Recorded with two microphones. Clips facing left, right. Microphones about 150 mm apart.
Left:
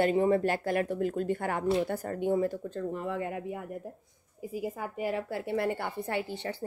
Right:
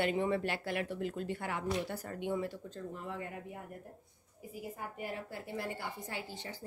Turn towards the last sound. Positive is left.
turn(degrees=65)  # may be behind; listen again after turning